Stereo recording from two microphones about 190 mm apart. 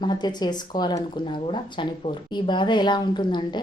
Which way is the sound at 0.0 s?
25° left (ahead or behind).